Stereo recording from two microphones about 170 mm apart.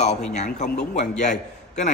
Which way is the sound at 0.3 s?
45° left (ahead or behind).